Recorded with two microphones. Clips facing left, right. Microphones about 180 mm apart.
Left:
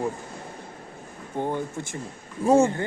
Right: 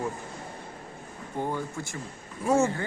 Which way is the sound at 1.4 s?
20° left (ahead or behind).